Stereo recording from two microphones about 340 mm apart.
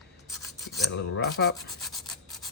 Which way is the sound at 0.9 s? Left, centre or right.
Left.